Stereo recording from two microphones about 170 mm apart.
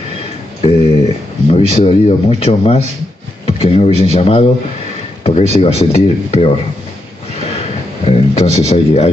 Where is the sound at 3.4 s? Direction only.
35° left (ahead or behind).